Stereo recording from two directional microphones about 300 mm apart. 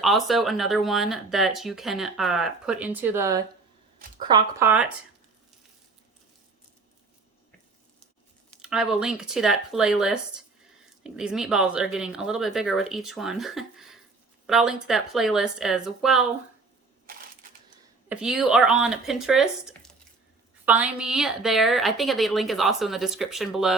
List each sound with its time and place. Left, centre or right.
0.0 s speech: centre
8.6 s speech: centre
18.1 s speech: centre